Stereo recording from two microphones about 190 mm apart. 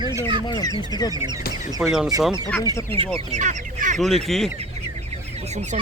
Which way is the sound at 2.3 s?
15° left (ahead or behind).